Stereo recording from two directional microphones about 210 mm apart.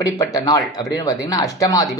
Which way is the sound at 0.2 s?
15° left (ahead or behind).